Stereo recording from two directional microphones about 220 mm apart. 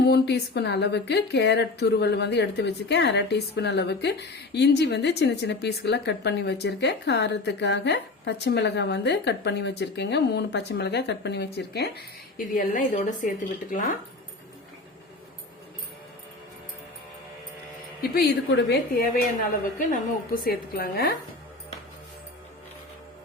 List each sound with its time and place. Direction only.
0.0 s speech: 50° left (ahead or behind)
12.4 s a woman's voice: 35° left (ahead or behind)
18.0 s speech: 45° left (ahead or behind)
19.9 s speech: 40° left (ahead or behind)